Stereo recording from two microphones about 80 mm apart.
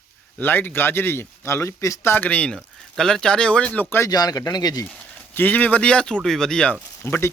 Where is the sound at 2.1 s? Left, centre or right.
Left.